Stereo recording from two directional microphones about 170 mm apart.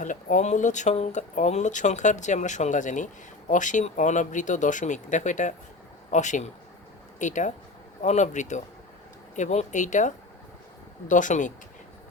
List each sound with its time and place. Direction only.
0.0 s speech: 50° left (ahead or behind)